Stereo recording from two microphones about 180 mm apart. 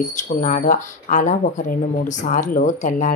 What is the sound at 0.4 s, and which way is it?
Speech, 45° left (ahead or behind).